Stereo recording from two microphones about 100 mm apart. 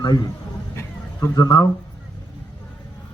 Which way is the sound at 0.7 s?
35° left (ahead or behind).